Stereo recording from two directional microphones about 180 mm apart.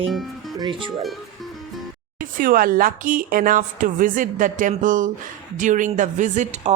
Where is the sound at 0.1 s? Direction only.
Centre (ahead or behind).